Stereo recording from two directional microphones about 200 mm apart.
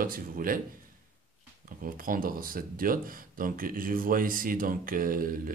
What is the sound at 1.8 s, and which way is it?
Speech, 45° right (ahead or behind).